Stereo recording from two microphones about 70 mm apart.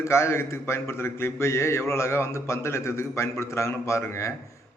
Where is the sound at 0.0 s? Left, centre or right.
Left.